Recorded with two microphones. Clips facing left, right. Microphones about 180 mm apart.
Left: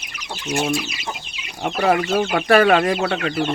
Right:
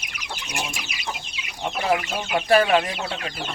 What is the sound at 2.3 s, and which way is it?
Speech, 75° left (ahead or behind).